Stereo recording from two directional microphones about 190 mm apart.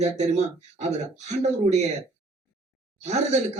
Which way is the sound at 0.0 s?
35° right (ahead or behind).